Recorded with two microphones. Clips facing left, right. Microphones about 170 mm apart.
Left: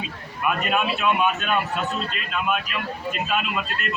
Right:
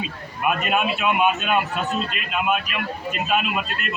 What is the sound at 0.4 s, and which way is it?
A man's voice, 20° right (ahead or behind).